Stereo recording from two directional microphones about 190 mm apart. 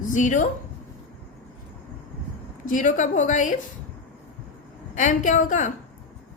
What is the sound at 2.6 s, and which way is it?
Speech, 45° left (ahead or behind).